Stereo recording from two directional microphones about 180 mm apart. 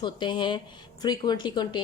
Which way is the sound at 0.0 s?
25° left (ahead or behind).